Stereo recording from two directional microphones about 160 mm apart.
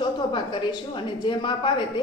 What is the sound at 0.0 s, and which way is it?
A woman's voice, 30° left (ahead or behind).